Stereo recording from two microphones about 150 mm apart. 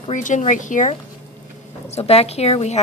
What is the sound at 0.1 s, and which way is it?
Speech, 55° left (ahead or behind).